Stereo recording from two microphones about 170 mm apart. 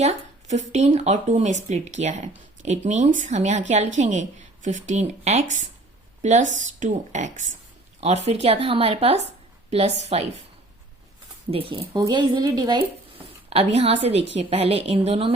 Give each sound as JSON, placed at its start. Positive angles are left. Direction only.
{"t": 0.0, "sound": "a sound", "side_deg": -40}
{"t": 0.7, "sound": "a woman's voice", "side_deg": -40}
{"t": 11.7, "sound": "speech", "side_deg": -25}
{"t": 13.5, "sound": "speech", "side_deg": -35}